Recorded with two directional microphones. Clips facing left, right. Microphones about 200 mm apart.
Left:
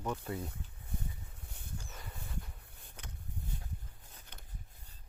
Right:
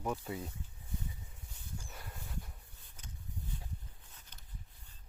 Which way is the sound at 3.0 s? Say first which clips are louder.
Left 3 dB; 65° left (ahead or behind).